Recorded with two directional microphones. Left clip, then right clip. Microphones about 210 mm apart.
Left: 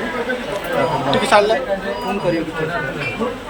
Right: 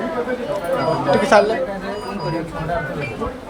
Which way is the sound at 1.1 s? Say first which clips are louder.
Even; 20° right (ahead or behind).